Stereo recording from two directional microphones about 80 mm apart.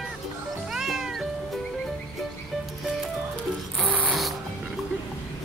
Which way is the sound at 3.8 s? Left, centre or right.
Centre.